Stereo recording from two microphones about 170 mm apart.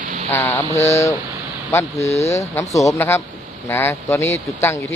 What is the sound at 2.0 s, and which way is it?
Speech, 40° left (ahead or behind).